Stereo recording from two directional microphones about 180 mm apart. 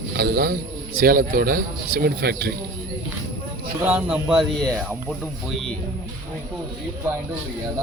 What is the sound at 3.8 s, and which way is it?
Speech, 10° right (ahead or behind).